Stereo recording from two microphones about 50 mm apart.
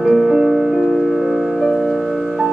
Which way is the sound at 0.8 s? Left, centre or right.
Centre.